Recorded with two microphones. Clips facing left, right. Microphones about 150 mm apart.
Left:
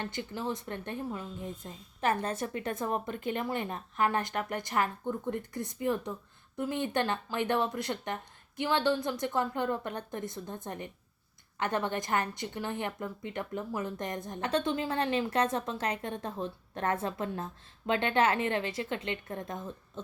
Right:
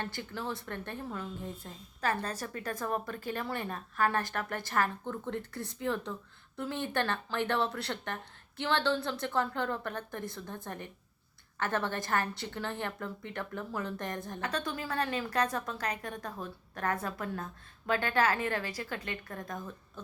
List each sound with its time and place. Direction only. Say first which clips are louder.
0.0 s a woman's voice: left 2 dB; 15° left (ahead or behind)